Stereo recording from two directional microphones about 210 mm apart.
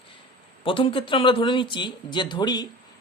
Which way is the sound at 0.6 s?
25° left (ahead or behind).